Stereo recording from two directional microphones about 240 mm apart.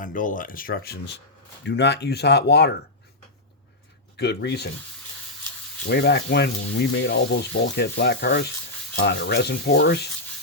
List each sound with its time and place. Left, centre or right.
0.0 s speech: left
4.2 s speech: left
5.9 s speech: left